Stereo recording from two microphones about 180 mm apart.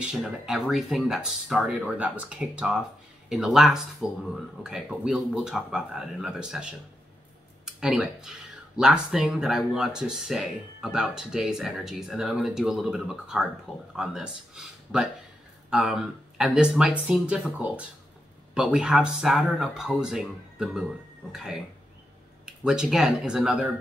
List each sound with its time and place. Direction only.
0.0 s speech: 5° right (ahead or behind)